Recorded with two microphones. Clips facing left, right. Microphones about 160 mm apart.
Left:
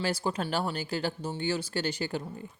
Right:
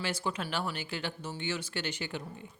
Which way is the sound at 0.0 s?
35° left (ahead or behind).